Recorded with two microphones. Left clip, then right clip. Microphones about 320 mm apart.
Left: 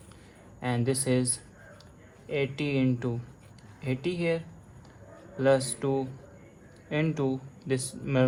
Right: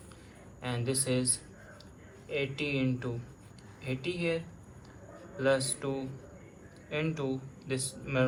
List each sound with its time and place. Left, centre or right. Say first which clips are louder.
0.6 s speech: left 5 dB; left